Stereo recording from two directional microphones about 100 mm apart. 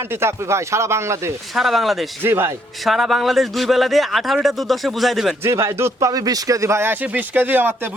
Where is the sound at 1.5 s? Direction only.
Centre (ahead or behind).